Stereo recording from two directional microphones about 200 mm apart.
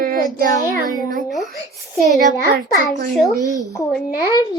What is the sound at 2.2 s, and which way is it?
Speech, 40° right (ahead or behind).